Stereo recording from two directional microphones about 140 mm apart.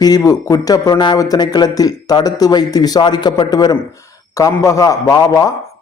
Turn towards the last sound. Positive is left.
turn(degrees=25)  # may be behind; listen again after turning